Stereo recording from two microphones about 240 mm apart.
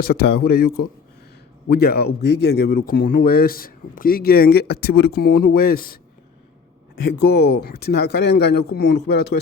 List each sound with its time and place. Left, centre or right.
0.0 s speech: left